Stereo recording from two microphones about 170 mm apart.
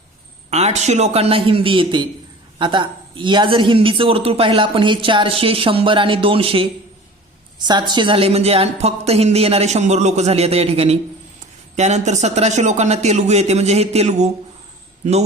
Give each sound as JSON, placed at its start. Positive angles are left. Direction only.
{"t": 0.5, "sound": "a man's voice", "side_deg": -40}